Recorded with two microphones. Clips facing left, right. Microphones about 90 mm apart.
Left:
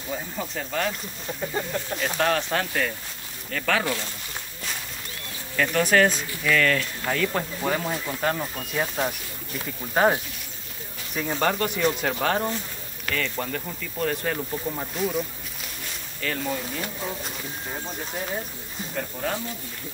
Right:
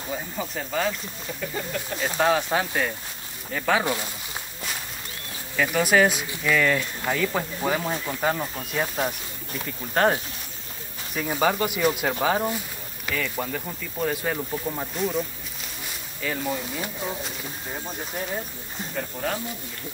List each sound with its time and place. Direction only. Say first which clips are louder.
0.1 s speech: even; 5° right (ahead or behind)
2.0 s speech: right 2 dB; 10° right (ahead or behind)
5.6 s speech: even; 5° right (ahead or behind)
11.1 s speech: right 1 dB; 5° right (ahead or behind)